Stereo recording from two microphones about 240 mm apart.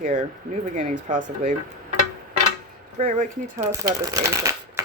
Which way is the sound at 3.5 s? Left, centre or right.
Centre.